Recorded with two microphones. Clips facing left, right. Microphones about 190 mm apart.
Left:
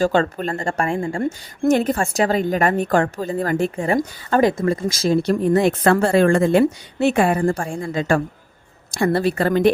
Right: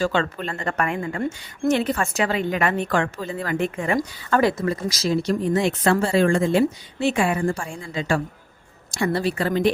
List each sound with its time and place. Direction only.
0.0 s a woman's voice: 45° left (ahead or behind)
0.6 s speech: 30° left (ahead or behind)
1.2 s a woman's voice: 45° left (ahead or behind)
4.7 s speech: 50° left (ahead or behind)
7.3 s a woman's voice: 45° left (ahead or behind)